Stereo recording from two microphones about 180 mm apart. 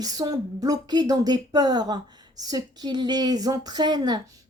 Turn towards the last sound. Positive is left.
turn(degrees=-25)  # may be behind; listen again after turning